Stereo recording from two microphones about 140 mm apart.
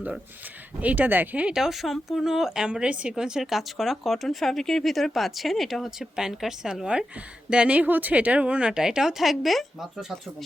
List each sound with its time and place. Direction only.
0.8 s a woman's voice: 10° right (ahead or behind)